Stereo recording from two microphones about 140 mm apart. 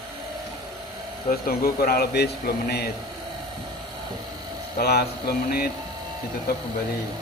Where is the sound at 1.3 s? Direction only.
90° left.